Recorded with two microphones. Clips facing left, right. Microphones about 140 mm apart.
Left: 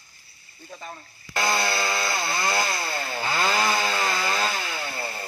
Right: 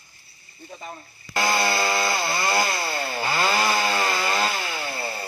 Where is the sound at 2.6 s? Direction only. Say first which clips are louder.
Right 2 dB; 5° right (ahead or behind).